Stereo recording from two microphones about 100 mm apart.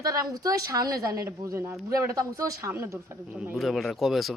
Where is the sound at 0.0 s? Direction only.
35° right (ahead or behind).